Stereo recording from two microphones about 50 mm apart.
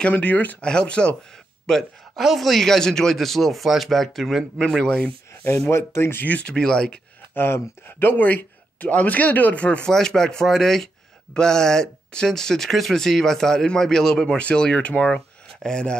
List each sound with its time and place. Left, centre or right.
0.1 s speech: left
0.7 s speech: centre
2.1 s speech: centre
5.7 s speech: left
6.4 s speech: centre
7.3 s speech: left
8.1 s speech: left
9.8 s speech: centre
14.4 s speech: left